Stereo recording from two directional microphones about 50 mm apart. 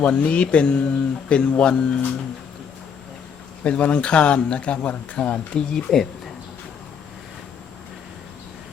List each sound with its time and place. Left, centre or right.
0.0 s speech: left
3.6 s speech: left